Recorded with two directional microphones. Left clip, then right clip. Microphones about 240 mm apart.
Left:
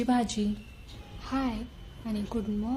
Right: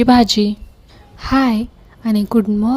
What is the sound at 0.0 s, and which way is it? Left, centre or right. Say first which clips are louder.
A woman's voice: right 16 dB; right.